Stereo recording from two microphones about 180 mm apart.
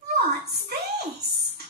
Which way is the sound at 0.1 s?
60° right (ahead or behind).